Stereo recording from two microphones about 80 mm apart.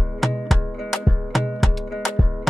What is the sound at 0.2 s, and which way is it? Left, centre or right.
Music, centre.